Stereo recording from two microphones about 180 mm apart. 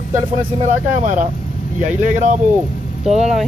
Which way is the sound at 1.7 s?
10° right (ahead or behind).